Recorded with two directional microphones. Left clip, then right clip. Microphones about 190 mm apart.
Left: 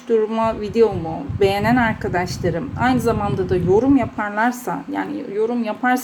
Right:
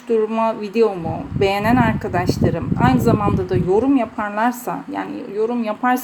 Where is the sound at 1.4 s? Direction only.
15° right (ahead or behind).